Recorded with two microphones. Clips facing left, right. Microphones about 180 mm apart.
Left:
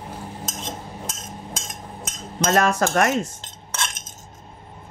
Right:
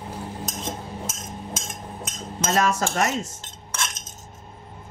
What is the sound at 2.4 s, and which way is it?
Speech, 55° left (ahead or behind).